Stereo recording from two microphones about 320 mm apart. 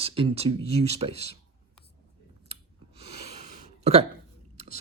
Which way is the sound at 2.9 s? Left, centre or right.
Centre.